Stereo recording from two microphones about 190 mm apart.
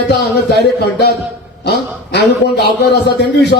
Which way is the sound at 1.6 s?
60° left (ahead or behind).